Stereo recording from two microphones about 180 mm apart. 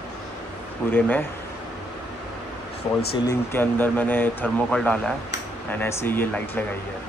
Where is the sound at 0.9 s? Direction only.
10° left (ahead or behind).